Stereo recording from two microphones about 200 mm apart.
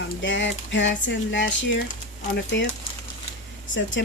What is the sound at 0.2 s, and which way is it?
Speech, 65° left (ahead or behind).